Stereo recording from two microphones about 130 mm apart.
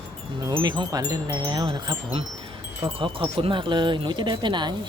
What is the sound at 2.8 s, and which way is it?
Speech, 40° right (ahead or behind).